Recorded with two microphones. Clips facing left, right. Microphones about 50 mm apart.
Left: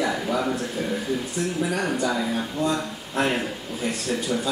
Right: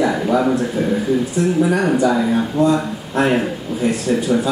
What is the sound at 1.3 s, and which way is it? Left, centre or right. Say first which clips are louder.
Speech: right 9 dB; centre.